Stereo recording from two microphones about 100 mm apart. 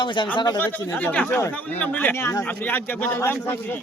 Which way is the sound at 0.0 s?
50° left (ahead or behind).